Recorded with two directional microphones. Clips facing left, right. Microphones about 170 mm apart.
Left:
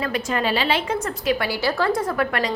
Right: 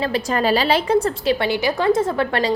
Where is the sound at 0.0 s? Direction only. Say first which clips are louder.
Right 3 dB; 35° right (ahead or behind).